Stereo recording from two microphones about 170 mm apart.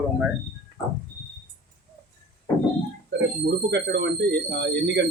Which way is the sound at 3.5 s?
85° right.